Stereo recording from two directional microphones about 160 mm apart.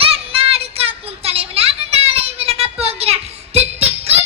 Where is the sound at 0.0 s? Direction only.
35° right (ahead or behind).